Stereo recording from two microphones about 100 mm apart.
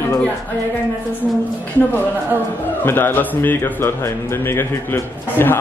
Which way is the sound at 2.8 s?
20° left (ahead or behind).